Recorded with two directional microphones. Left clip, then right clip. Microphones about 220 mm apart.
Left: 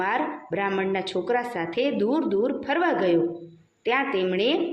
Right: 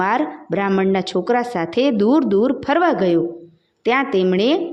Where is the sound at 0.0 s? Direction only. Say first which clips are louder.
Right 6 dB; 55° right (ahead or behind).